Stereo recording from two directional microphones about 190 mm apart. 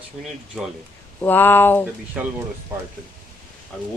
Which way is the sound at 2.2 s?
5° right (ahead or behind).